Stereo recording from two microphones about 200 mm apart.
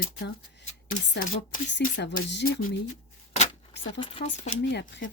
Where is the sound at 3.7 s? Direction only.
60° left (ahead or behind).